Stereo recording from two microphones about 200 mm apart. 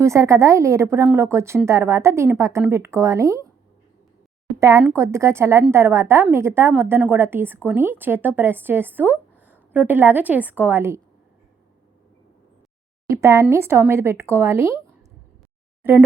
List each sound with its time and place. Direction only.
0.0 s a woman's voice: 15° right (ahead or behind)
4.6 s a woman's voice: 15° right (ahead or behind)
13.1 s a woman's voice: 15° right (ahead or behind)